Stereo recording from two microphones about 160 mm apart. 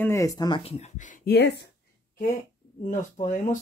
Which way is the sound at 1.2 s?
90° left.